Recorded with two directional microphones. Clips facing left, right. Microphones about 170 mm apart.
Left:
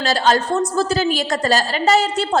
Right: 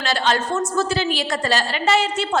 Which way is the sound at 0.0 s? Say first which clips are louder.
Left 4 dB; 40° left (ahead or behind).